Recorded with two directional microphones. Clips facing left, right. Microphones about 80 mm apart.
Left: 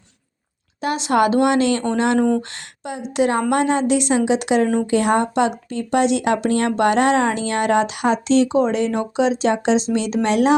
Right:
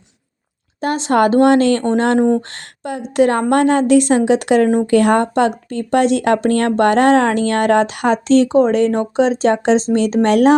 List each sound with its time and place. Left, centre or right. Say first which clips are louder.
0.8 s speech: right 3 dB; right
2.1 s speech: right 3 dB; right
2.8 s speech: right 5 dB; right